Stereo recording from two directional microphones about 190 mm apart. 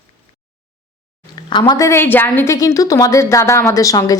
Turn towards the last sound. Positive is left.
turn(degrees=20)  # may be behind; listen again after turning